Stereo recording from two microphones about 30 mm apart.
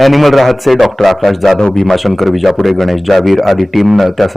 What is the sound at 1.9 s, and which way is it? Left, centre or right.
A man's voice, centre.